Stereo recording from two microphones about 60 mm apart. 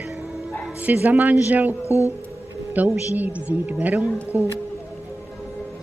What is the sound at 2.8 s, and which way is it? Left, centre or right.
A woman's voice, right.